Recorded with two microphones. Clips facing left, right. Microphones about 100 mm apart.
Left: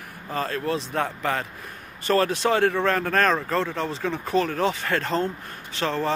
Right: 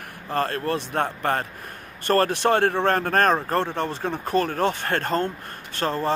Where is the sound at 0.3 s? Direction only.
55° right (ahead or behind).